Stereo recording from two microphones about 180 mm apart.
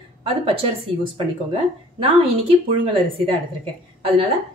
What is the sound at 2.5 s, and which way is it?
Speech, 30° right (ahead or behind).